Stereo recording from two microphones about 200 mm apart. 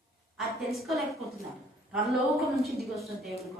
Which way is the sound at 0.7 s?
Centre (ahead or behind).